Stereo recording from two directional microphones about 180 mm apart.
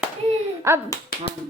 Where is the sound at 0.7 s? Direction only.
15° right (ahead or behind).